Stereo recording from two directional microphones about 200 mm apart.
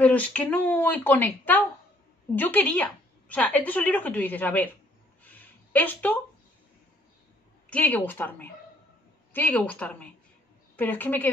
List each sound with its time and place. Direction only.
0.0 s a woman's voice: 5° left (ahead or behind)
5.2 s a sound: 10° left (ahead or behind)
7.7 s a woman's voice: 10° left (ahead or behind)